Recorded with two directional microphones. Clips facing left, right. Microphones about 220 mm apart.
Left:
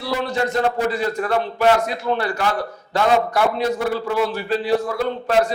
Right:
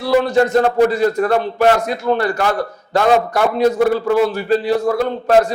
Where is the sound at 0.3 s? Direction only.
45° right (ahead or behind).